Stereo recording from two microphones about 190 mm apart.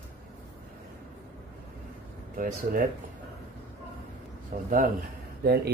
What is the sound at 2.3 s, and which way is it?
Speech, 45° right (ahead or behind).